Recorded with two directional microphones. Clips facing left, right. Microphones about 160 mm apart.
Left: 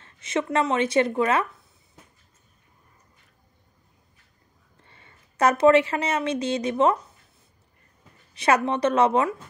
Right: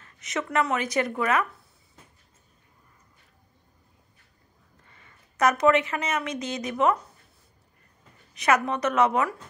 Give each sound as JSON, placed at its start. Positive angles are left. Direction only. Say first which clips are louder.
{"t": 0.0, "sound": "speech", "louder": "left 5 dB", "side_deg": 30}
{"t": 4.8, "sound": "speech", "louder": "left 2 dB", "side_deg": 30}
{"t": 8.4, "sound": "a woman's voice", "louder": "left 2 dB", "side_deg": 30}